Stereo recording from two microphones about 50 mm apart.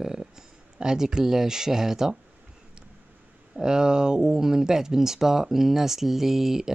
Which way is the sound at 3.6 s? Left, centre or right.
Centre.